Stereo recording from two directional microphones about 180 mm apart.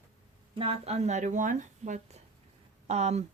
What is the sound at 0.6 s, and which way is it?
Speech, 35° right (ahead or behind).